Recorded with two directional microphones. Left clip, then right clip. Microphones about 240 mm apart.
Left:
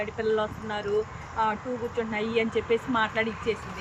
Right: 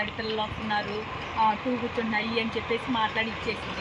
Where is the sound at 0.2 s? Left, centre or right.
Centre.